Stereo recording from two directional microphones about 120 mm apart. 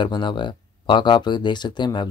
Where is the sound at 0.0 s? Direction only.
40° left (ahead or behind).